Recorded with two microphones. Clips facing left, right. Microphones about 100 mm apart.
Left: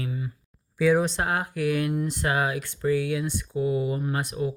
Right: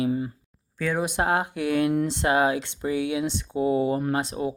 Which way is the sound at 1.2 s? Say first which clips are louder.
Right 2 dB; 25° right (ahead or behind).